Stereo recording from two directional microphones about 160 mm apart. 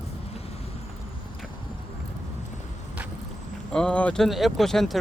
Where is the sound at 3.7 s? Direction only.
5° left (ahead or behind).